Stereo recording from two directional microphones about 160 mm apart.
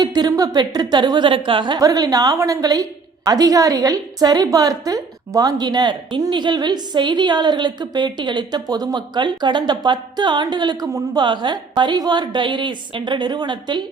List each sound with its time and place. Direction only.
0.0 s a woman's voice: 25° right (ahead or behind)